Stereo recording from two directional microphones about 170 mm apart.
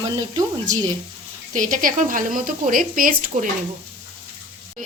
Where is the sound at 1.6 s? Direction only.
50° right (ahead or behind).